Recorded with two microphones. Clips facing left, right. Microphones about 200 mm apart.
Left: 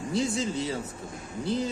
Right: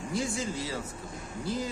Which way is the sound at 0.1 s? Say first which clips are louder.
Left 4 dB; 25° left (ahead or behind).